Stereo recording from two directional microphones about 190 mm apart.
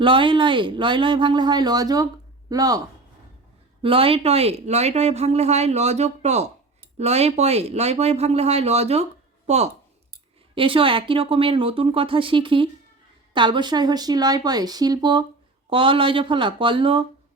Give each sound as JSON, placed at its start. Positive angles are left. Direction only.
{"t": 0.0, "sound": "speech", "side_deg": -25}
{"t": 3.8, "sound": "speech", "side_deg": -30}
{"t": 10.5, "sound": "speech", "side_deg": -30}